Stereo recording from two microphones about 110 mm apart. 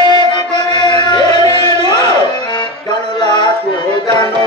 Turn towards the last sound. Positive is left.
turn(degrees=40)  # may be behind; listen again after turning